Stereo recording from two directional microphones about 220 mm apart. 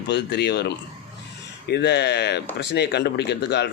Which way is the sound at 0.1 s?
50° left (ahead or behind).